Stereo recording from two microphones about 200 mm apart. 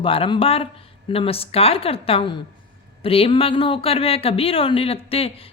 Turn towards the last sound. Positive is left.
turn(degrees=30)  # may be behind; listen again after turning